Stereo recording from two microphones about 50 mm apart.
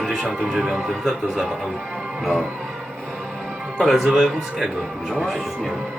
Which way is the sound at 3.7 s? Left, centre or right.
Centre.